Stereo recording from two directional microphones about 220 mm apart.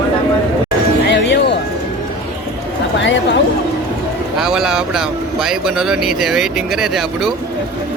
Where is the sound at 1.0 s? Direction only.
55° left (ahead or behind).